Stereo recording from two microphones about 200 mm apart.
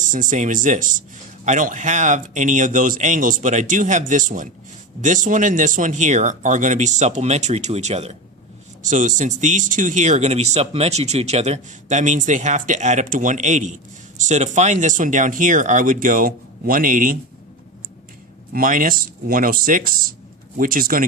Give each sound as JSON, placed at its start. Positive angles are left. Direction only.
{"t": 0.0, "sound": "speech", "side_deg": -40}
{"t": 18.5, "sound": "speech", "side_deg": -45}